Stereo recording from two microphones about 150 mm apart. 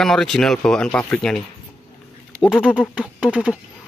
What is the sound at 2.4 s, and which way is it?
Speech, 5° right (ahead or behind).